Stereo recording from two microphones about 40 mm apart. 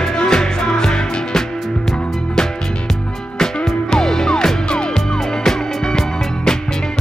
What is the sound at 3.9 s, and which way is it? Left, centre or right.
Music, centre.